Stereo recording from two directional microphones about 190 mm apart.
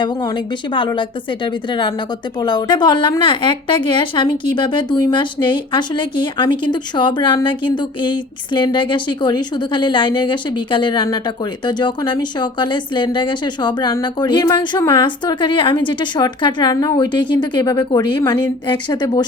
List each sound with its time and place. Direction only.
0.0 s a woman's voice: 20° left (ahead or behind)
2.4 s a woman's voice: 25° left (ahead or behind)